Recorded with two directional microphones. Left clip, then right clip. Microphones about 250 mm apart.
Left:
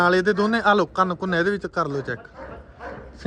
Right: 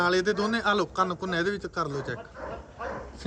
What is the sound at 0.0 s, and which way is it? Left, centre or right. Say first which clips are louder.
A man's voice: left 6 dB; centre.